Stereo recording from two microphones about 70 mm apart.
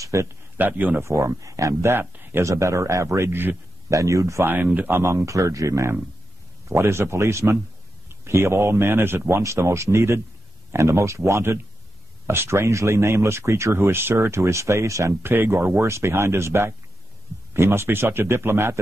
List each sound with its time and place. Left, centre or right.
0.0 s a sound: right
0.6 s speech: right
1.0 s speech: right
2.4 s speech: right
3.9 s speech: right
4.7 s speech: right
5.1 s speech: right
9.4 s speech: right
15.2 s speech: right